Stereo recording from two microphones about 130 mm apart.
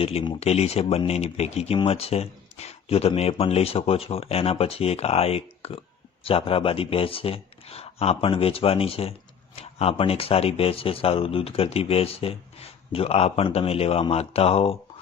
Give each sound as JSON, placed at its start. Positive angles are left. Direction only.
{"t": 0.0, "sound": "speech", "side_deg": 45}